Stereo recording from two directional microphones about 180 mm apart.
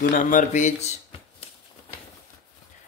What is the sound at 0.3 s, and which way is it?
Speech, 45° left (ahead or behind).